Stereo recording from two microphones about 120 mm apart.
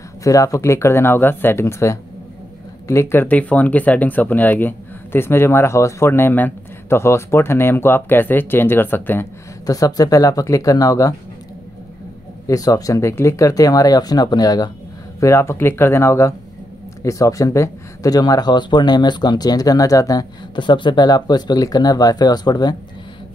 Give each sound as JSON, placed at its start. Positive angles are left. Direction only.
{"t": 0.2, "sound": "speech", "side_deg": 30}
{"t": 9.7, "sound": "speech", "side_deg": 30}
{"t": 12.4, "sound": "speech", "side_deg": 30}